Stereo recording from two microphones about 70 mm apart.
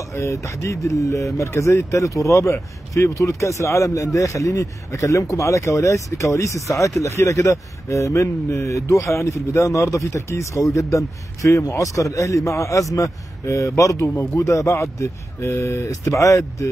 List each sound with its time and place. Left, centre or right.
0.1 s speech: left